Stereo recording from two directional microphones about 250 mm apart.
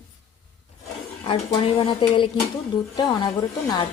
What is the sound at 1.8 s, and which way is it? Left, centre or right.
Speech, centre.